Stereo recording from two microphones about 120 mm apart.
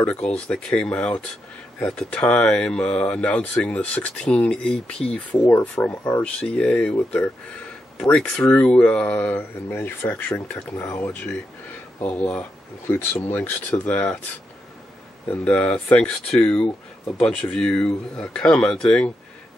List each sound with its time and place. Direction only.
0.0 s speech: 10° left (ahead or behind)
15.2 s speech: 10° left (ahead or behind)